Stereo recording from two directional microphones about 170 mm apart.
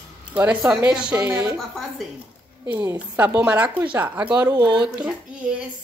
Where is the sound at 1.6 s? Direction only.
Centre (ahead or behind).